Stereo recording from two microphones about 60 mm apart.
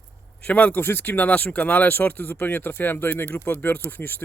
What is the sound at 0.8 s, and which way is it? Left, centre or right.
Speech, left.